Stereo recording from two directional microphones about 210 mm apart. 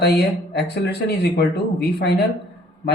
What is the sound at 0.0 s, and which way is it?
Speech, 50° left (ahead or behind).